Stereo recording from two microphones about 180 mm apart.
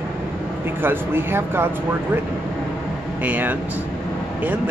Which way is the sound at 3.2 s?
10° right (ahead or behind).